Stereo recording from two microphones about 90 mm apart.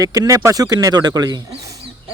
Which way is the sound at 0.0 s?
40° right (ahead or behind).